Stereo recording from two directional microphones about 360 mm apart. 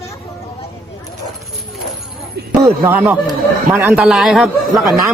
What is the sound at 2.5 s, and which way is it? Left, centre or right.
A man's voice, centre.